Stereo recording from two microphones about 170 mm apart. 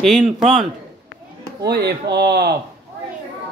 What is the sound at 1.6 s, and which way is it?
Speech, 75° right (ahead or behind).